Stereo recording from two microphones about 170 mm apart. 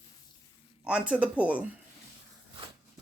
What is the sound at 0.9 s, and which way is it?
Speech, 5° right (ahead or behind).